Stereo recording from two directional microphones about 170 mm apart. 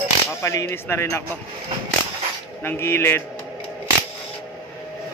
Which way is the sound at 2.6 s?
15° left (ahead or behind).